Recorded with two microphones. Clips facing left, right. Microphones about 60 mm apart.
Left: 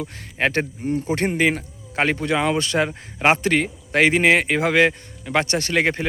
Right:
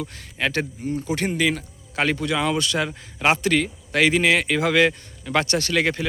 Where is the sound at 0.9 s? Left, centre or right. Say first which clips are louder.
Left 4 dB; left.